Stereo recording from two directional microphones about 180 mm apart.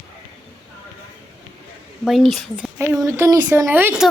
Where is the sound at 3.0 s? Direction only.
20° right (ahead or behind).